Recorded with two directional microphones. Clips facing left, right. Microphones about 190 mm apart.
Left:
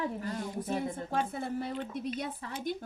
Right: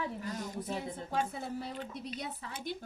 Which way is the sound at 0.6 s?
50° left (ahead or behind).